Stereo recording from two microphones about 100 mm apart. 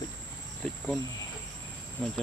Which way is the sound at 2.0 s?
5° left (ahead or behind).